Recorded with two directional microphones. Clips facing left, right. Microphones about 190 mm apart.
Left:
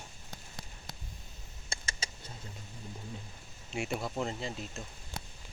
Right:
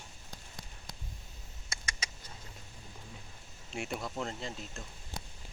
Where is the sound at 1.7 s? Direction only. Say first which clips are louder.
Left 1 dB; 30° left (ahead or behind).